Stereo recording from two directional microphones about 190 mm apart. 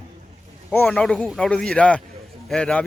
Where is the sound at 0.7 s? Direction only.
10° left (ahead or behind).